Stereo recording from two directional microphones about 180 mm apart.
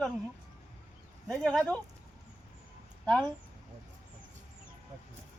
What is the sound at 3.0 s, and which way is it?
Speech, 5° left (ahead or behind).